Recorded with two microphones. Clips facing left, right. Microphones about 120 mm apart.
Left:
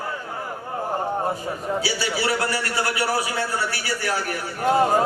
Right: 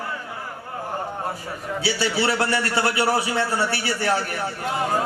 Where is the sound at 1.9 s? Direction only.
30° right (ahead or behind).